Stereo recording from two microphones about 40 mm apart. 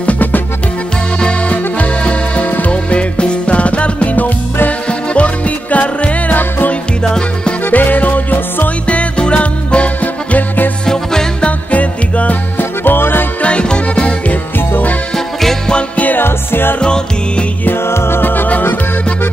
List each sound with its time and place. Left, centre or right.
0.0 s music: left
1.5 s music: left
7.1 s music: left
7.6 s music: left
8.8 s music: left
11.4 s music: left
12.5 s music: left
13.4 s music: left
16.2 s music: left
16.8 s music: left
17.8 s music: left